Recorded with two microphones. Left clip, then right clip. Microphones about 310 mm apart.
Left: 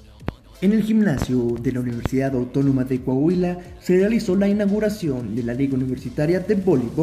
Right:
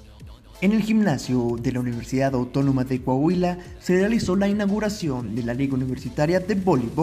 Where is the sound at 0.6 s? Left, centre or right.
Centre.